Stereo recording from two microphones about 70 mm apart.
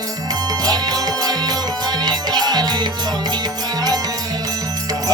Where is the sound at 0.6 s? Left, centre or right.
Right.